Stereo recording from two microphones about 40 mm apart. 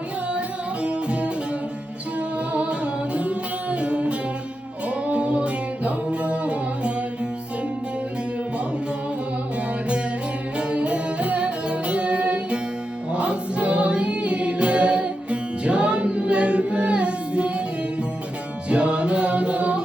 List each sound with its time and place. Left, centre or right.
0.3 s music: right
10.6 s music: right
18.7 s music: right